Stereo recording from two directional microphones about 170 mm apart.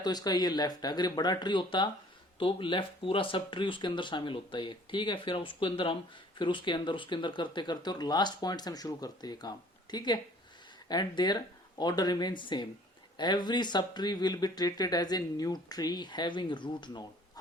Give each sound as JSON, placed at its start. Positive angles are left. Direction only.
{"t": 0.0, "sound": "speech", "side_deg": 25}